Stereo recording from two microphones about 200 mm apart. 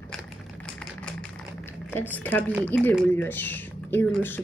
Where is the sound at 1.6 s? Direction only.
10° left (ahead or behind).